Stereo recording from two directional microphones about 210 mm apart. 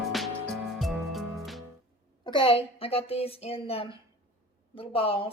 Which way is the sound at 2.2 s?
25° left (ahead or behind).